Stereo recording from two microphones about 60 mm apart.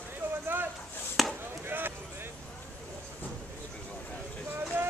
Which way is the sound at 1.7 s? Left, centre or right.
Right.